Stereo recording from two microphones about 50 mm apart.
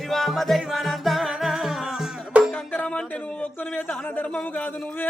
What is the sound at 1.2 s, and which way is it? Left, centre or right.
Music, centre.